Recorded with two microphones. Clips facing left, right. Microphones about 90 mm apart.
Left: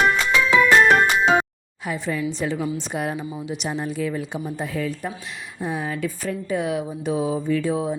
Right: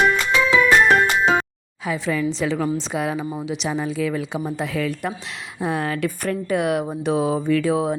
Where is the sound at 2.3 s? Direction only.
90° right.